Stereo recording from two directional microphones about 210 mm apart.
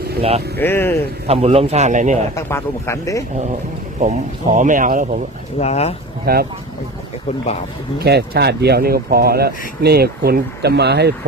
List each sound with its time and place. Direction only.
0.2 s speech: 30° right (ahead or behind)
0.6 s speech: 10° left (ahead or behind)
1.3 s speech: 30° right (ahead or behind)
2.3 s speech: 15° left (ahead or behind)
4.0 s speech: 35° right (ahead or behind)
5.5 s speech: 30° left (ahead or behind)
6.3 s speech: 45° right (ahead or behind)
7.9 s speech: 50° right (ahead or behind)